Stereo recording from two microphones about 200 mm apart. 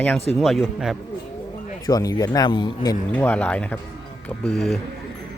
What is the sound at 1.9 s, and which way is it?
Speech, 20° left (ahead or behind).